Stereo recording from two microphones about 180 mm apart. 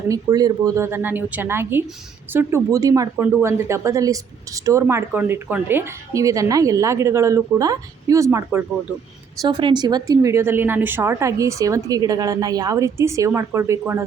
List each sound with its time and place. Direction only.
0.1 s speech: 20° right (ahead or behind)